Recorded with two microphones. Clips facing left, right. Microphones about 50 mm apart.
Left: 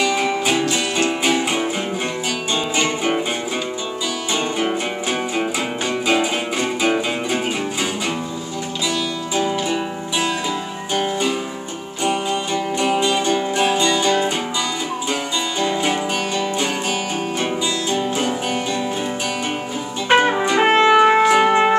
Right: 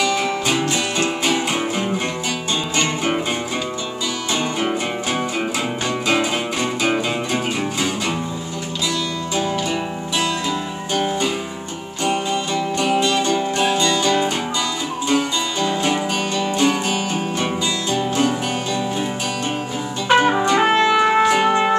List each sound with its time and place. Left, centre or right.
0.0 s music: centre
2.7 s music: centre
6.0 s music: centre
11.1 s music: centre
15.6 s music: centre
20.2 s music: centre
20.5 s music: left
21.2 s music: centre